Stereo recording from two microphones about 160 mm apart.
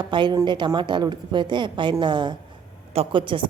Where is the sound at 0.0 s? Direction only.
30° right (ahead or behind).